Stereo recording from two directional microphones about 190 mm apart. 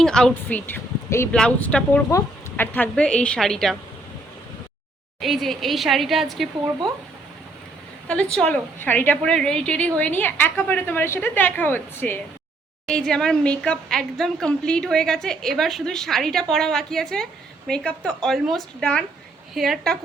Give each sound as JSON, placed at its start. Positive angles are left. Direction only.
{"t": 0.0, "sound": "a woman's voice", "side_deg": 5}
{"t": 5.2, "sound": "a woman's voice", "side_deg": 0}
{"t": 8.0, "sound": "a woman's voice", "side_deg": 5}